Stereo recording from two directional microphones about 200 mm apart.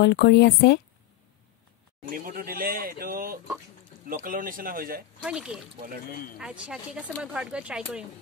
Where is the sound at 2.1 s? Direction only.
45° right (ahead or behind).